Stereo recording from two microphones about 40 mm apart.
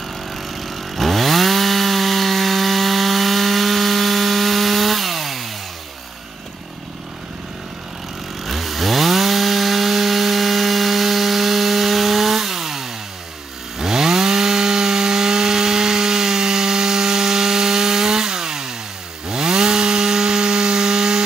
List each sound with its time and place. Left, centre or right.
0.3 s chainsaw: centre
8.5 s chainsaw: centre
13.7 s wood: centre